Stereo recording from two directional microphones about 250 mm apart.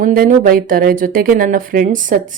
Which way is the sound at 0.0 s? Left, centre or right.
Right.